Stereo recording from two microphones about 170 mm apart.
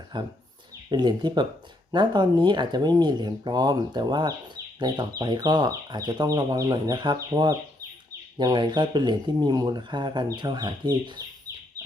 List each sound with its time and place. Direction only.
0.1 s speech: 25° right (ahead or behind)